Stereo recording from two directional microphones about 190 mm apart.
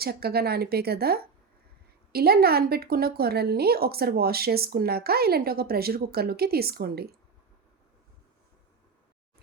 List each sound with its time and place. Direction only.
0.0 s a woman's voice: 55° right (ahead or behind)